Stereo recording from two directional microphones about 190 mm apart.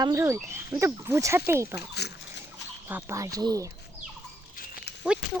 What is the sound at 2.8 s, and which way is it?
Speech, 10° right (ahead or behind).